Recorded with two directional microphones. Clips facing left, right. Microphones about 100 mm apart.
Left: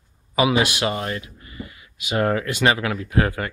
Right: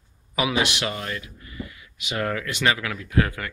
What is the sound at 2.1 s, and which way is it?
Speech, 25° left (ahead or behind).